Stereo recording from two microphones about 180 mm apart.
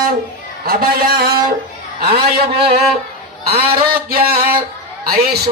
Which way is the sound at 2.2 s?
30° right (ahead or behind).